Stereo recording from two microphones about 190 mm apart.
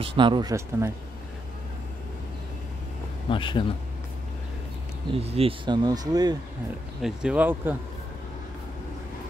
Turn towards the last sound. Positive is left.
turn(degrees=-10)  # may be behind; listen again after turning